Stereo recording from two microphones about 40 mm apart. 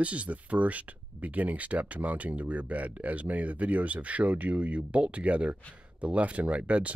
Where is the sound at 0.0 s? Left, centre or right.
Right.